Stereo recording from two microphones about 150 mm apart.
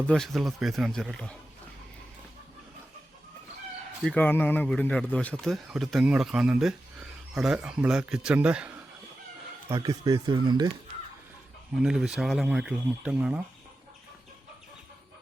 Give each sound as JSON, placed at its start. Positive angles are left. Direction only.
{"t": 0.1, "sound": "speech", "side_deg": 0}
{"t": 4.0, "sound": "speech", "side_deg": 10}
{"t": 9.6, "sound": "speech", "side_deg": -20}
{"t": 11.8, "sound": "speech", "side_deg": -5}